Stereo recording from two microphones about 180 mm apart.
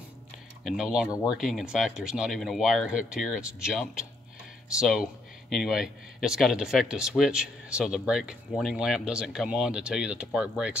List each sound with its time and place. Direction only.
0.7 s speech: 5° right (ahead or behind)